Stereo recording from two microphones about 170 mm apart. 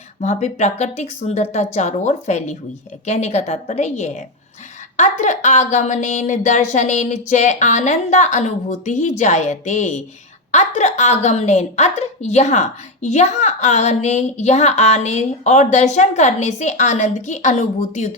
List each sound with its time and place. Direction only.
0.2 s a woman's voice: 40° left (ahead or behind)